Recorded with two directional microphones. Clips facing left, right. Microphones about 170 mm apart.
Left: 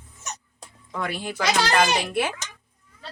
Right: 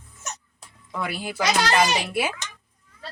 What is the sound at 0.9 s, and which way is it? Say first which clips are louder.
A woman's voice: even; 5° right (ahead or behind).